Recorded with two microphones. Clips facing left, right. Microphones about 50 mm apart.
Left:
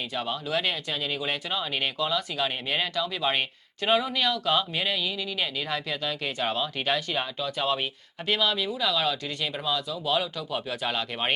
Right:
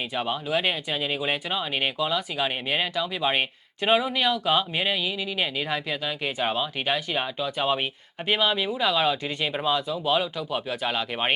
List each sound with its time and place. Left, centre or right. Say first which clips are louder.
0.1 s speech: right 3 dB; centre